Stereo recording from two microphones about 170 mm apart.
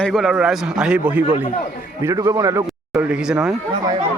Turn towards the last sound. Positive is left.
turn(degrees=-5)  # may be behind; listen again after turning